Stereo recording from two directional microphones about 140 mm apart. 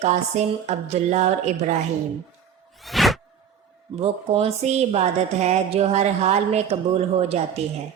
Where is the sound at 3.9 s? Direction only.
45° right (ahead or behind).